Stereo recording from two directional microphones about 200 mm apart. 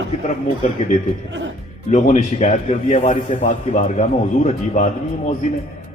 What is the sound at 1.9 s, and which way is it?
A man's voice, 35° left (ahead or behind).